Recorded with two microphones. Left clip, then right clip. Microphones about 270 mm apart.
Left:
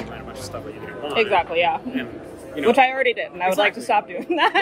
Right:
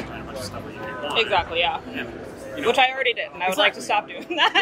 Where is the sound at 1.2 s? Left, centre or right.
Left.